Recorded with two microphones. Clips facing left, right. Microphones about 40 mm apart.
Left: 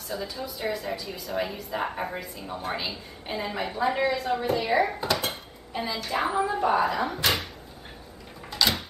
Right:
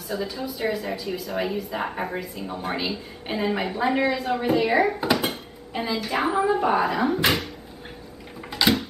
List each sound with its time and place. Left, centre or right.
0.1 s a woman's voice: centre
3.3 s a woman's voice: centre
8.5 s a sound: centre